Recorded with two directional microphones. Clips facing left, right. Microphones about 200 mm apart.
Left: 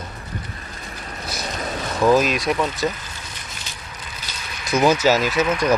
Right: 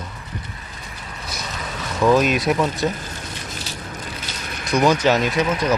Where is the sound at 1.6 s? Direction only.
40° left (ahead or behind).